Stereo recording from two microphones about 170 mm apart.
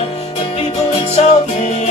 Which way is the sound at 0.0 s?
35° left (ahead or behind).